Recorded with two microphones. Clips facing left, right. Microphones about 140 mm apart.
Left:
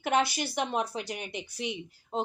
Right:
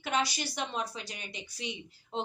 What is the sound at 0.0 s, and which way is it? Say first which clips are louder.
A woman's voice: left 5 dB; 55° left (ahead or behind).